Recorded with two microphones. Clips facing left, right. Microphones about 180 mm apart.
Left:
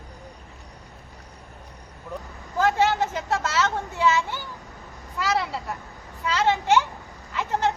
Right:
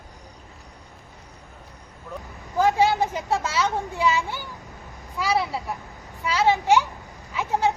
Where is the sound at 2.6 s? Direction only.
10° right (ahead or behind).